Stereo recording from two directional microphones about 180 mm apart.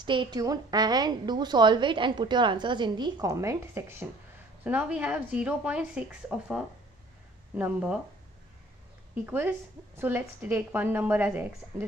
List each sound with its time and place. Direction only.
0.0 s a woman's voice: 25° right (ahead or behind); by 8.0 s 5° right (ahead or behind)
9.2 s a woman's voice: 10° right (ahead or behind)